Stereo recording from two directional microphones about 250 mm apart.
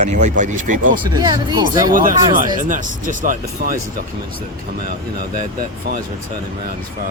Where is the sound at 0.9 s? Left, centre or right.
Centre.